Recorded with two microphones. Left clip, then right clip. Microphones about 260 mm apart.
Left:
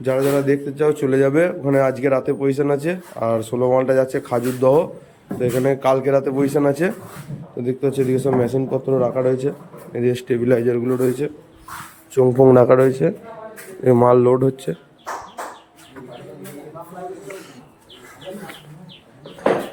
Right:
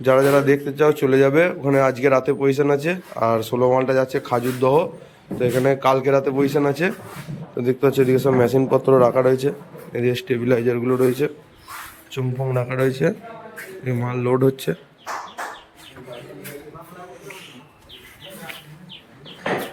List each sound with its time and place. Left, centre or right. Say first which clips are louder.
0.0 s a man's voice: right 3 dB; centre